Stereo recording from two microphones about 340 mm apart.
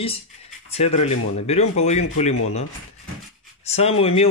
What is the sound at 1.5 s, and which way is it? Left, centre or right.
Speech, centre.